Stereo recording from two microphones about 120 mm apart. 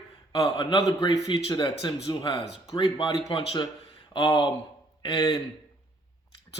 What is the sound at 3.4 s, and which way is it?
Speech, 55° left (ahead or behind).